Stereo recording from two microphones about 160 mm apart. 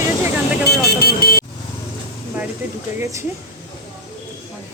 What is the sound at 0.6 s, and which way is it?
Speech, 90° left.